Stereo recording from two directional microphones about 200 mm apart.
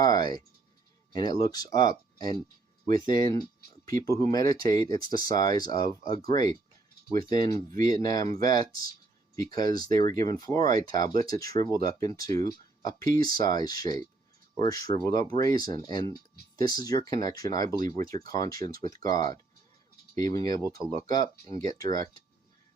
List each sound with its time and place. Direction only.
0.0 s speech: 20° left (ahead or behind)